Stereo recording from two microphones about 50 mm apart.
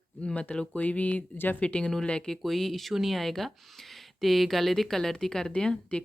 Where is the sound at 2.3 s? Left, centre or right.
Centre.